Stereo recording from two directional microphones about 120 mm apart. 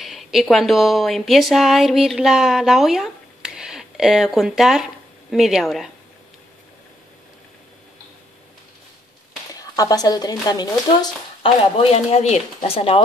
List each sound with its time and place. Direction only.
0.0 s speech: centre (ahead or behind)
9.6 s speech: 30° left (ahead or behind)
11.4 s speech: 60° left (ahead or behind)